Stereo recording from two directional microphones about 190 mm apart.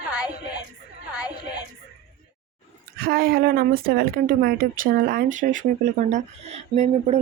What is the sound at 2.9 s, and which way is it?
Speech, 50° right (ahead or behind).